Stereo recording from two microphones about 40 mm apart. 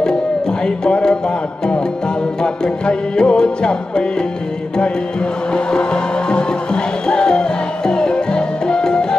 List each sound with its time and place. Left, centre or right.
0.0 s music: left
2.4 s music: left
5.5 s music: left